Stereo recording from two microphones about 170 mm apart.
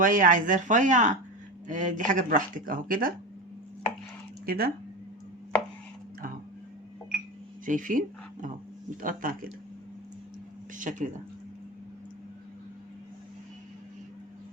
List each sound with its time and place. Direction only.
0.0 s speech: 50° right (ahead or behind)
4.4 s speech: 60° right (ahead or behind)
7.6 s speech: 50° right (ahead or behind)
10.8 s speech: 50° right (ahead or behind)